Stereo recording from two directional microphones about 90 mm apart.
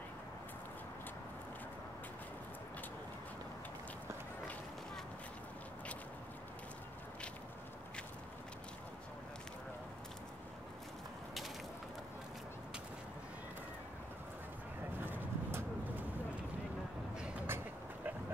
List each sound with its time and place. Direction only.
15.0 s pigeon: 20° right (ahead or behind)
17.5 s vehicle: 25° right (ahead or behind)